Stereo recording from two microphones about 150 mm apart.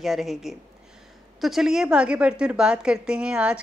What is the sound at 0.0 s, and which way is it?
A woman's voice, centre (ahead or behind).